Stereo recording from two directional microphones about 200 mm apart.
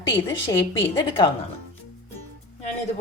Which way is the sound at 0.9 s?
25° left (ahead or behind).